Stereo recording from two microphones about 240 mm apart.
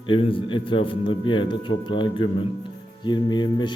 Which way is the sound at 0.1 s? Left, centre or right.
Left.